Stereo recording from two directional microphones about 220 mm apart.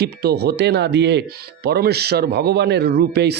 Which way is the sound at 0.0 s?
45° right (ahead or behind).